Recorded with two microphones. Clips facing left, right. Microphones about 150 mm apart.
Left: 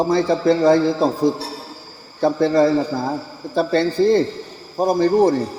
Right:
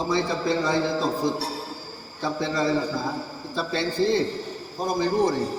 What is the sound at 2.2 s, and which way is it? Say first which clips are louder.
A man's voice: left 10 dB; 55° left (ahead or behind).